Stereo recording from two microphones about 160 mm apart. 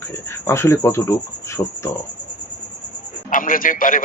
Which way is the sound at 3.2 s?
55° left (ahead or behind).